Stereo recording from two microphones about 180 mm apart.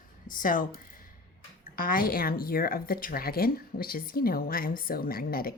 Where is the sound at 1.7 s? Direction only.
50° left (ahead or behind).